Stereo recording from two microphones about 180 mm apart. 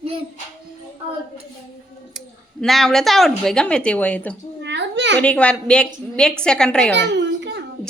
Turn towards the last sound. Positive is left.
turn(degrees=-75)  # may be behind; listen again after turning